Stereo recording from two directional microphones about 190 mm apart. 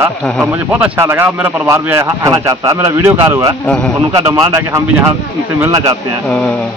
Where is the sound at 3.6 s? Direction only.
5° left (ahead or behind).